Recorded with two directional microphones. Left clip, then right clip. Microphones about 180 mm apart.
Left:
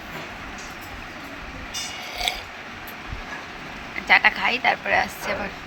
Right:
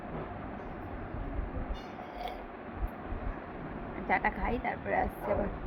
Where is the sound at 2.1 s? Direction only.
10° right (ahead or behind).